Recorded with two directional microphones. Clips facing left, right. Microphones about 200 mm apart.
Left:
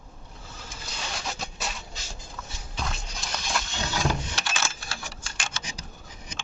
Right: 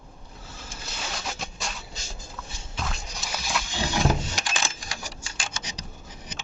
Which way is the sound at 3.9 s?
15° right (ahead or behind).